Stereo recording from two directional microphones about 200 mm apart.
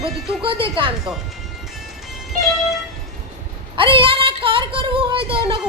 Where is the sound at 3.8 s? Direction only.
25° right (ahead or behind).